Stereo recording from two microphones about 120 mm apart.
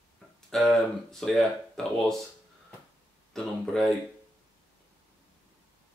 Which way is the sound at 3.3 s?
5° left (ahead or behind).